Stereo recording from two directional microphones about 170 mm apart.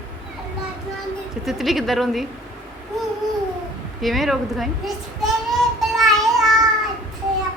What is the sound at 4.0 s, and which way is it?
A woman's voice, centre (ahead or behind).